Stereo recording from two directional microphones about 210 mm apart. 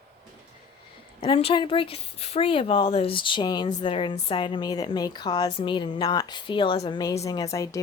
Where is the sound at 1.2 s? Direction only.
25° left (ahead or behind).